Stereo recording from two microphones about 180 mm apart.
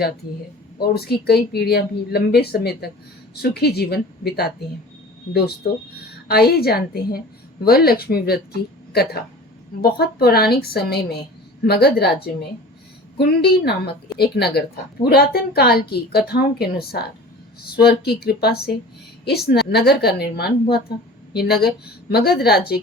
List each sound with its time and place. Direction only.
0.8 s speech: 60° left (ahead or behind)
6.2 s speech: 60° left (ahead or behind)